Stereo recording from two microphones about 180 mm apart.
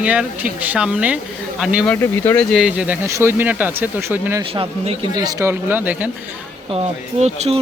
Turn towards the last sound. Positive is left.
turn(degrees=-35)  # may be behind; listen again after turning